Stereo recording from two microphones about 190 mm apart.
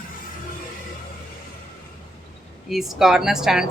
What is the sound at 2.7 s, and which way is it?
Speech, centre (ahead or behind).